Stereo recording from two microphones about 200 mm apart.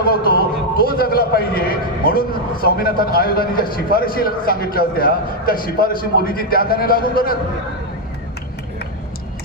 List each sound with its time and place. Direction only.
0.0 s vehicle: 50° left (ahead or behind)
0.9 s a man's voice: 50° left (ahead or behind)